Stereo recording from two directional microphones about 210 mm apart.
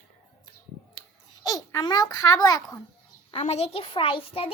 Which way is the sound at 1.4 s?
15° left (ahead or behind).